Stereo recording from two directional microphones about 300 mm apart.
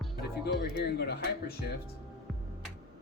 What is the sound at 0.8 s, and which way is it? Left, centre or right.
Speech, left.